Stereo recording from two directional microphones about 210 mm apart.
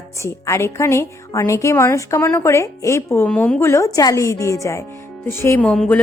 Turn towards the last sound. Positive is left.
turn(degrees=5)  # may be behind; listen again after turning